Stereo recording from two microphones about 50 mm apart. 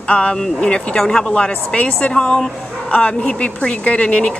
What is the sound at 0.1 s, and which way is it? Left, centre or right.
A woman's voice, left.